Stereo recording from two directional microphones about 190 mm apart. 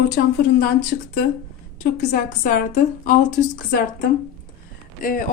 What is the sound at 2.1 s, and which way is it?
Speech, 40° left (ahead or behind).